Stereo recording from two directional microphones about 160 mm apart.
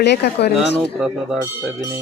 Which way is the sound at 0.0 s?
90° left.